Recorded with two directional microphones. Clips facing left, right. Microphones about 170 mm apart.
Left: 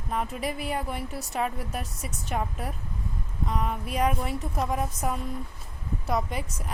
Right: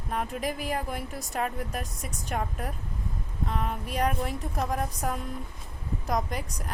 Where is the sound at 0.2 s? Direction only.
Centre (ahead or behind).